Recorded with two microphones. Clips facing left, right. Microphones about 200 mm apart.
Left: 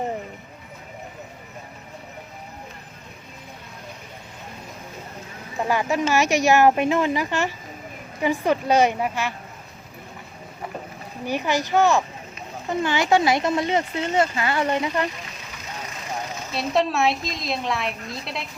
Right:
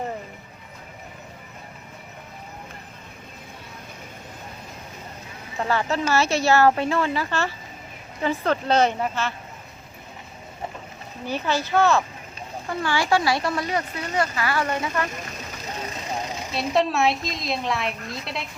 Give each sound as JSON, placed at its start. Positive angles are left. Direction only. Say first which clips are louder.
{"t": 5.5, "sound": "speech", "louder": "left 2 dB", "side_deg": 15}
{"t": 11.3, "sound": "speech", "louder": "left 2 dB", "side_deg": 15}
{"t": 16.5, "sound": "a woman's voice", "louder": "even", "side_deg": 0}